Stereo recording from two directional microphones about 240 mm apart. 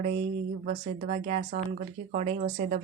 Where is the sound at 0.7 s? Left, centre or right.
Right.